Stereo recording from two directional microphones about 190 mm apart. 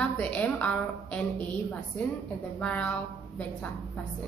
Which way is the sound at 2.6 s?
5° left (ahead or behind).